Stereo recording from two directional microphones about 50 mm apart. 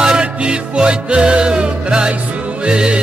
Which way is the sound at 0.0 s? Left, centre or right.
Centre.